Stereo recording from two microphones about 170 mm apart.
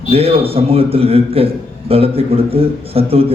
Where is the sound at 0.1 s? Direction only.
35° right (ahead or behind).